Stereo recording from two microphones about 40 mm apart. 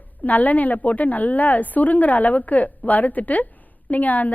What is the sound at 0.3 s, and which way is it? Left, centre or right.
A woman's voice, left.